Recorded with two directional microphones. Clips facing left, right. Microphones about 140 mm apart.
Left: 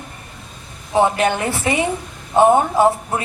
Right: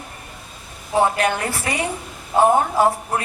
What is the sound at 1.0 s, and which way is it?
Speech, 25° left (ahead or behind).